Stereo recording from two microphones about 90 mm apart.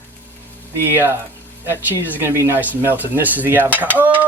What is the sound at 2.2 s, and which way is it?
Cutlery, 25° right (ahead or behind).